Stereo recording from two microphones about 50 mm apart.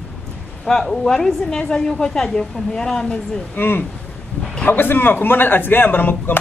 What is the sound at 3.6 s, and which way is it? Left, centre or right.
Speech, left.